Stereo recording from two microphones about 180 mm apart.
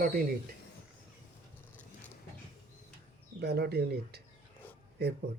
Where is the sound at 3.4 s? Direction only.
65° right (ahead or behind).